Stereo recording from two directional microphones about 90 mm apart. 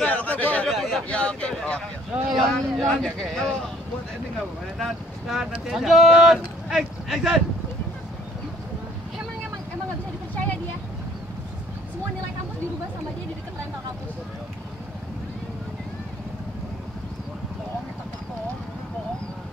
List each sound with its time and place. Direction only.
0.0 s a sound: 15° left (ahead or behind)
0.7 s a sound: centre (ahead or behind)
1.0 s speech: 10° left (ahead or behind)
2.2 s speech: centre (ahead or behind)
4.7 s speech: centre (ahead or behind)
10.3 s vehicle: 15° left (ahead or behind)